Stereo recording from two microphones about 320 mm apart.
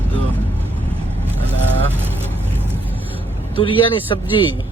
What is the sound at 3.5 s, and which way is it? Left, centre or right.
Speech, centre.